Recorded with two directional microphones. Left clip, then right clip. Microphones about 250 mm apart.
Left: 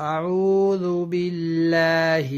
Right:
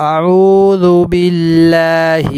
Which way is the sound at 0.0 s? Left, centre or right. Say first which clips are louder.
Right 13 dB; right.